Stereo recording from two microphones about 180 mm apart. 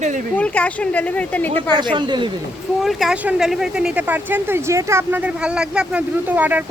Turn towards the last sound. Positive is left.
turn(degrees=-10)  # may be behind; listen again after turning